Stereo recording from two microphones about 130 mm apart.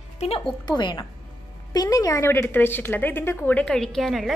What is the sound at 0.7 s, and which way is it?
A woman's voice, 35° left (ahead or behind).